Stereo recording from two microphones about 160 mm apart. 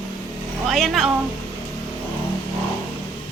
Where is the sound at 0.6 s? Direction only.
Centre (ahead or behind).